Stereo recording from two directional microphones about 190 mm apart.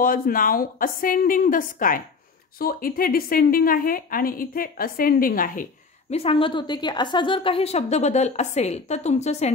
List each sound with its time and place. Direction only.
0.0 s a woman's voice: 45° left (ahead or behind)
6.1 s a woman's voice: 30° left (ahead or behind)